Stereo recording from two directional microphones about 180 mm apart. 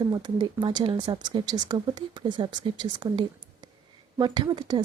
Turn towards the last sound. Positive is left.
turn(degrees=-25)  # may be behind; listen again after turning